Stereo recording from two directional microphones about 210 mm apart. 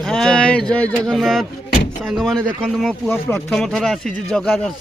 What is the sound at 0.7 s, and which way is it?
Speech, 5° left (ahead or behind).